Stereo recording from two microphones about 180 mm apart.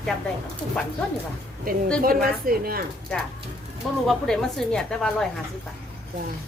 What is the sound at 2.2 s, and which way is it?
Speech, 55° right (ahead or behind).